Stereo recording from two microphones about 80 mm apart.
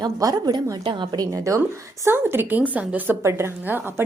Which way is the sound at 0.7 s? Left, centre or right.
Right.